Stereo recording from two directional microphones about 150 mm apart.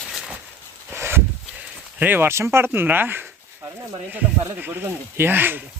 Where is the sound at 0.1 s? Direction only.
Centre (ahead or behind).